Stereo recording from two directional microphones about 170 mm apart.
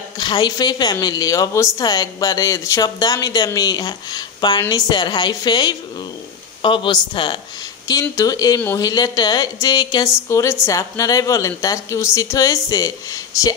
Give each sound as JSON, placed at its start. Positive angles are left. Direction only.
{"t": 0.2, "sound": "a woman's voice", "side_deg": 25}